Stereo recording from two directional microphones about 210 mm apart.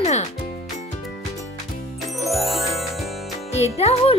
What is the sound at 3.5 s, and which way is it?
Speech, 30° left (ahead or behind).